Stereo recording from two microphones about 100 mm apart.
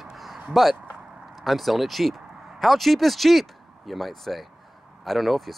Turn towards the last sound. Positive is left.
turn(degrees=0)  # may be behind; listen again after turning